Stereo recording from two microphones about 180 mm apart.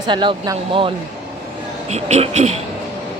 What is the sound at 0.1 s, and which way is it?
Speech, 25° right (ahead or behind).